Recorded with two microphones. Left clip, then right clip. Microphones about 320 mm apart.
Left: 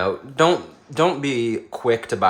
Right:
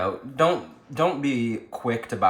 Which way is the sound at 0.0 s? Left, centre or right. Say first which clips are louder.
Left 4 dB; left.